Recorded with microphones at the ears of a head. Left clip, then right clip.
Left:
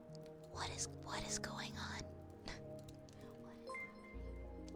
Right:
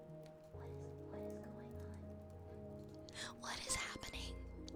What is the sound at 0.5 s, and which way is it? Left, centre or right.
Music, left.